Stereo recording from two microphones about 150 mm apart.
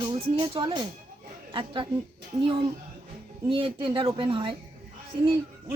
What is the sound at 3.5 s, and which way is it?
Speech, 35° right (ahead or behind).